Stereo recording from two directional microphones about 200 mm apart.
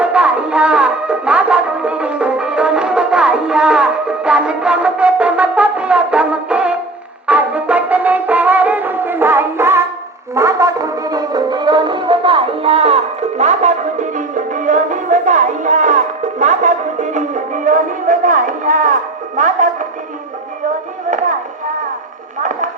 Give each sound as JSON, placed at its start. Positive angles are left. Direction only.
{"t": 0.0, "sound": "music", "side_deg": -5}